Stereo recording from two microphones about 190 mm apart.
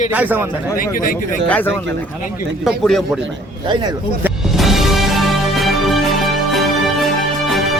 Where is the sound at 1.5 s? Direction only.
10° left (ahead or behind).